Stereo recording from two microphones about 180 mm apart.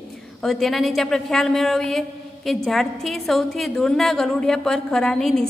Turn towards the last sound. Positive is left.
turn(degrees=0)  # may be behind; listen again after turning